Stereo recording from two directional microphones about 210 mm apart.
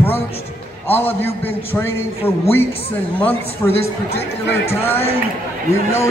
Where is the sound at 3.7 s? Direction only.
30° left (ahead or behind).